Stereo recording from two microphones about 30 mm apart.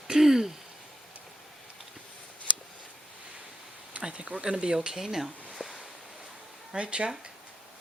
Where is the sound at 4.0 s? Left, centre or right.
Right.